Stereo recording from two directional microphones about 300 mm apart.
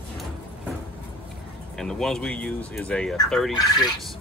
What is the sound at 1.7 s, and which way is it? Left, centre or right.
Speech, centre.